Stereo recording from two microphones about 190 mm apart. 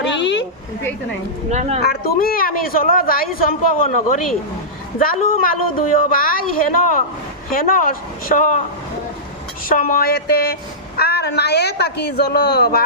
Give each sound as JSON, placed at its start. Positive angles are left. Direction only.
{"t": 0.0, "sound": "a sound", "side_deg": 70}
{"t": 1.5, "sound": "a woman's voice", "side_deg": -35}
{"t": 1.8, "sound": "a woman's voice", "side_deg": 55}
{"t": 9.6, "sound": "a woman's voice", "side_deg": 50}